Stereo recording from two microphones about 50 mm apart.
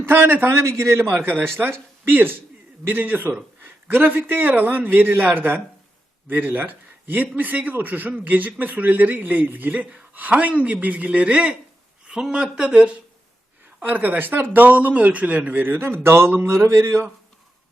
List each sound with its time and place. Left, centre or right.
0.1 s speech: right
0.4 s a man's voice: right
13.8 s a man's voice: right
15.6 s a man's voice: right